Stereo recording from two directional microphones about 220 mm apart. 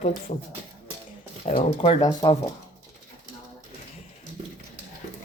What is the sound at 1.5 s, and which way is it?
Speech, 25° left (ahead or behind).